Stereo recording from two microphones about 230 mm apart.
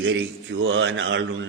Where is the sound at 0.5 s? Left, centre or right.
Right.